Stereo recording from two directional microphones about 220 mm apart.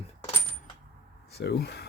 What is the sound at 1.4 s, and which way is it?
Speech, 45° left (ahead or behind).